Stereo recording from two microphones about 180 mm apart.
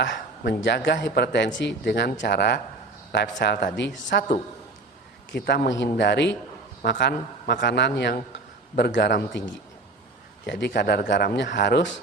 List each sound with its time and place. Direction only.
0.0 s a man's voice: 75° left (ahead or behind)
10.4 s a man's voice: 70° left (ahead or behind)